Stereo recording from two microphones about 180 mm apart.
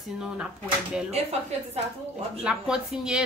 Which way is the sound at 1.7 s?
35° right (ahead or behind).